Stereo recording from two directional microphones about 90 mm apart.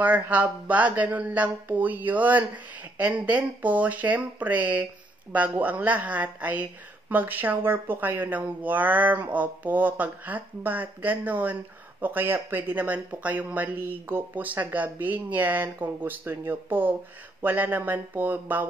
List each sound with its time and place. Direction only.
0.0 s a woman's voice: 15° right (ahead or behind)